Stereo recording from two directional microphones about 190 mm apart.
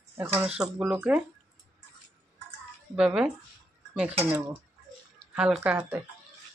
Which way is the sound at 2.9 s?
5° right (ahead or behind).